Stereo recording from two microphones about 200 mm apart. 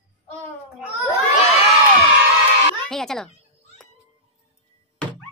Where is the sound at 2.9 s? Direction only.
Centre (ahead or behind).